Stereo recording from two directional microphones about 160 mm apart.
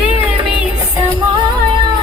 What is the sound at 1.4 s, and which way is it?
Music, 30° right (ahead or behind).